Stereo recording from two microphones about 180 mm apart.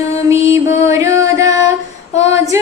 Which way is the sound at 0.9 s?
15° right (ahead or behind).